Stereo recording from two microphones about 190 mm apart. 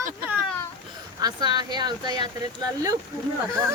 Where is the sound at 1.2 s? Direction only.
20° right (ahead or behind).